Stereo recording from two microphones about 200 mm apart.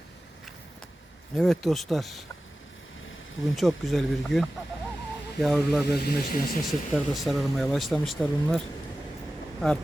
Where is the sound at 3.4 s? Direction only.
Centre (ahead or behind).